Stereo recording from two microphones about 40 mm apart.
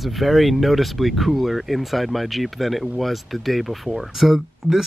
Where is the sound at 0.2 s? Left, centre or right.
Centre.